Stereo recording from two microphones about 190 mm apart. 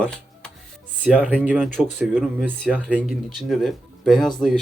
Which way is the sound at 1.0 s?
5° right (ahead or behind).